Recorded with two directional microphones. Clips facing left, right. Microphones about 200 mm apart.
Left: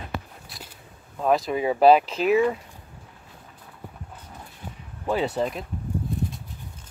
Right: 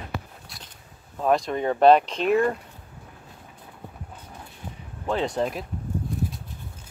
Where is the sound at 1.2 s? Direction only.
Centre (ahead or behind).